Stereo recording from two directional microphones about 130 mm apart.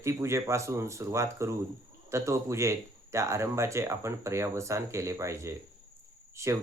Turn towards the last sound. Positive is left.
turn(degrees=-20)  # may be behind; listen again after turning